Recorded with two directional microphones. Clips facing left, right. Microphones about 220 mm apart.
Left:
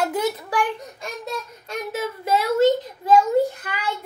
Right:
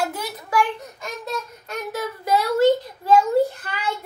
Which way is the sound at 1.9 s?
25° left (ahead or behind).